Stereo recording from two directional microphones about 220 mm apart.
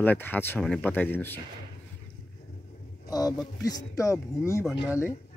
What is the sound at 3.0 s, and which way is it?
Speech, 15° left (ahead or behind).